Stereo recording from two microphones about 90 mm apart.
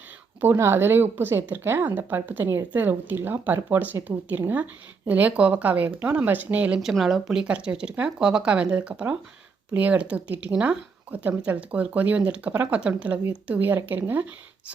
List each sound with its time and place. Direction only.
0.4 s a woman's voice: 25° right (ahead or behind)
6.7 s a woman's voice: centre (ahead or behind); by 14.3 s 20° right (ahead or behind)